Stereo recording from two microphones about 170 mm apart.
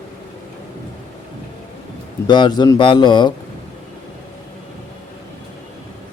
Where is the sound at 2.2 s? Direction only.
25° left (ahead or behind).